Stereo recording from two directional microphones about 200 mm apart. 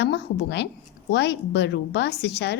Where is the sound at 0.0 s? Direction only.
60° left (ahead or behind).